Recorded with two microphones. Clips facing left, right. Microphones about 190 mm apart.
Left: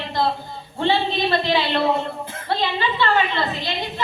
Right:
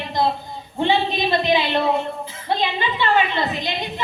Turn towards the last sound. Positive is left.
turn(degrees=-15)  # may be behind; listen again after turning